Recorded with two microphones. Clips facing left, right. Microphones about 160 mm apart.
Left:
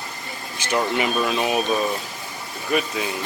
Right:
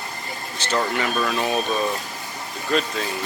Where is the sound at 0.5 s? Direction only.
15° left (ahead or behind).